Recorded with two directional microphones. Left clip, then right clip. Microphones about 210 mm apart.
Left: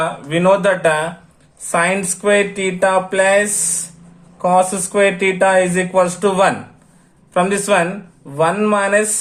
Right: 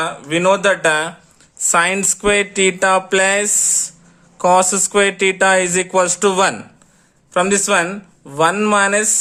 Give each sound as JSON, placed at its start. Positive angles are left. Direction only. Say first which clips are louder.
{"t": 0.0, "sound": "speech", "louder": "left 1 dB", "side_deg": -30}
{"t": 7.3, "sound": "speech", "louder": "even", "side_deg": -30}